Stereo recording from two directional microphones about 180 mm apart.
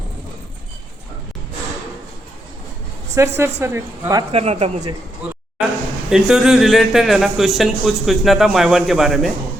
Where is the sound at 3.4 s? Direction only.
15° right (ahead or behind).